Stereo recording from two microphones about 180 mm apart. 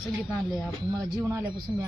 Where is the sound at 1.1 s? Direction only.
15° right (ahead or behind).